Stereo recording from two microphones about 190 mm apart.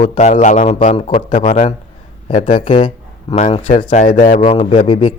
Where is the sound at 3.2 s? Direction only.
30° left (ahead or behind).